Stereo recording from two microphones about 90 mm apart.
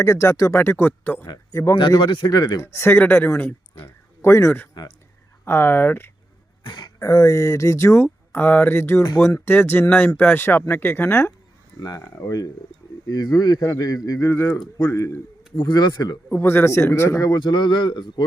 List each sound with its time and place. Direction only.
0.0 s speech: 35° left (ahead or behind)
1.3 s speech: 40° left (ahead or behind)
1.9 s a man's voice: 60° left (ahead or behind)
2.3 s speech: 45° left (ahead or behind); by 6.1 s 25° left (ahead or behind)
6.6 s throat clearing: 55° left (ahead or behind)
7.0 s speech: 40° left (ahead or behind)
8.0 s speech: 20° left (ahead or behind)
11.8 s speech: 40° left (ahead or behind)
13.6 s speech: 40° left (ahead or behind)
15.6 s speech: 55° left (ahead or behind)
16.3 s speech: 25° left (ahead or behind)
17.3 s a man's voice: 55° left (ahead or behind)